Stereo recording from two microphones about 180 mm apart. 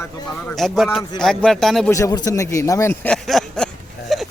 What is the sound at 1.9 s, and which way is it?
A man's voice, 20° left (ahead or behind).